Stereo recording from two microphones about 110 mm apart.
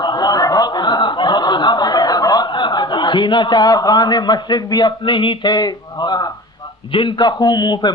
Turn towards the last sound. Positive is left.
turn(degrees=40)  # may be behind; listen again after turning